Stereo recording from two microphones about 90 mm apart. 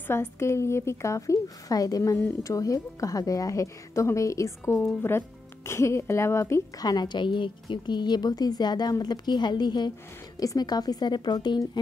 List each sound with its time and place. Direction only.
0.1 s a woman's voice: 30° left (ahead or behind)
6.8 s a woman's voice: 50° left (ahead or behind)